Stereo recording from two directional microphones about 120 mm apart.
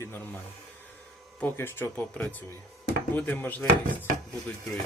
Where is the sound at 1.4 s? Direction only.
20° left (ahead or behind).